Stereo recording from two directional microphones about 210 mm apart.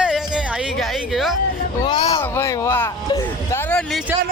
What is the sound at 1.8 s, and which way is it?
Speech, 20° left (ahead or behind).